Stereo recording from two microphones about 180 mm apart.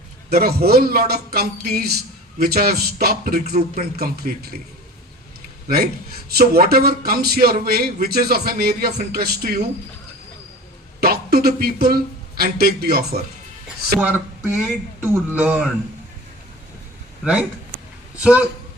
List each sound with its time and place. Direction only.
0.3 s a man's voice: 60° right (ahead or behind)
5.6 s a man's voice: 60° right (ahead or behind)
11.0 s speech: 60° right (ahead or behind)
13.7 s speech: 5° right (ahead or behind)
18.2 s speech: 5° right (ahead or behind)